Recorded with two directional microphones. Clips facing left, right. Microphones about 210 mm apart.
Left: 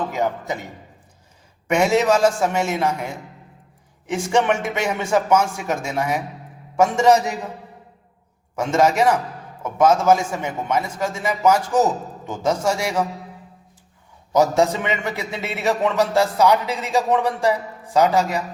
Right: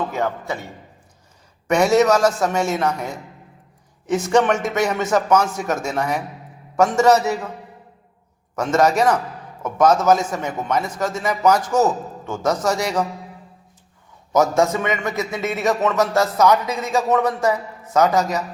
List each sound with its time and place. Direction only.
0.1 s a man's voice: 15° left (ahead or behind)
1.6 s a man's voice: 10° left (ahead or behind)
4.4 s a man's voice: 10° left (ahead or behind)
8.5 s a man's voice: 10° left (ahead or behind)
14.5 s a man's voice: 15° left (ahead or behind)